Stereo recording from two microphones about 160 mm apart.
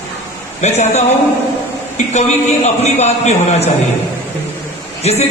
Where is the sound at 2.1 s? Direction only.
45° left (ahead or behind).